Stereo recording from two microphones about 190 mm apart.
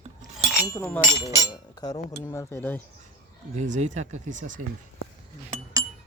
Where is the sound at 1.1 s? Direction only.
20° right (ahead or behind).